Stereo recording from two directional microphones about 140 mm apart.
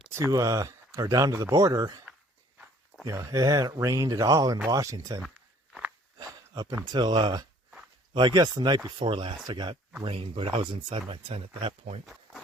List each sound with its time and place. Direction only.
0.2 s speech: 25° right (ahead or behind)
6.1 s a sound: 30° right (ahead or behind)
6.9 s speech: 35° right (ahead or behind)